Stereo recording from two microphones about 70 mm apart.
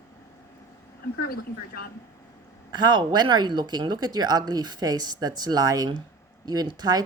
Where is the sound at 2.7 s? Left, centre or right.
Right.